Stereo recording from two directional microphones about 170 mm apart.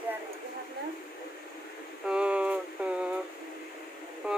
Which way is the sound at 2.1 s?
5° right (ahead or behind).